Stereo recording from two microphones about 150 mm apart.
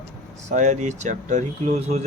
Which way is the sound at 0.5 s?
55° right (ahead or behind).